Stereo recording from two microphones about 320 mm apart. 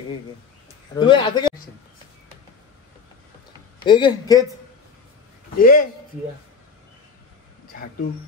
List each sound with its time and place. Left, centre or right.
0.9 s speech: centre
3.8 s speech: centre
5.6 s a man's voice: left